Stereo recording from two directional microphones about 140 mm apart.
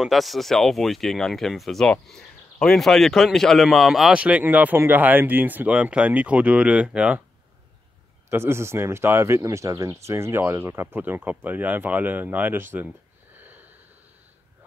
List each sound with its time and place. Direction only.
0.0 s speech: centre (ahead or behind)
8.3 s speech: 15° right (ahead or behind)
13.4 s a sound: 10° right (ahead or behind)